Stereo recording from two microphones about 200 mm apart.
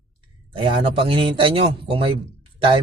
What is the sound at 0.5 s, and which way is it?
Speech, 25° right (ahead or behind).